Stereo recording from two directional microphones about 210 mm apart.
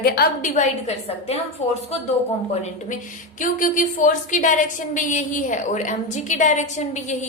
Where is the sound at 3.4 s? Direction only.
40° left (ahead or behind).